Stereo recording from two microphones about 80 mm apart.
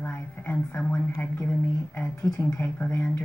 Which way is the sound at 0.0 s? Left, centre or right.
Left.